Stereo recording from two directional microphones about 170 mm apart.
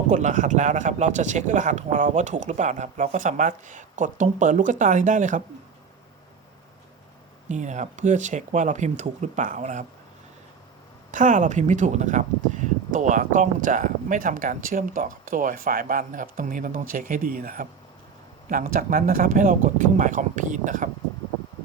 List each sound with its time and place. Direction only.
0.1 s speech: 45° right (ahead or behind)
7.4 s speech: 45° right (ahead or behind)
11.1 s speech: 50° right (ahead or behind)